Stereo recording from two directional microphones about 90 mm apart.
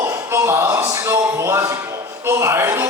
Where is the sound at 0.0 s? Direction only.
30° right (ahead or behind).